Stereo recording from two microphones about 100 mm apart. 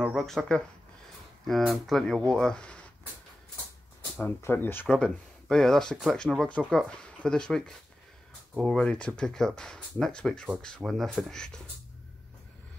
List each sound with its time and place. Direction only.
0.0 s speech: centre (ahead or behind)
4.4 s speech: 20° left (ahead or behind)
4.8 s speech: 5° left (ahead or behind)